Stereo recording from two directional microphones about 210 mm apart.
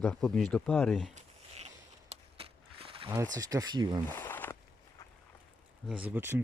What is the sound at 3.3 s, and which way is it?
Speech, 15° right (ahead or behind).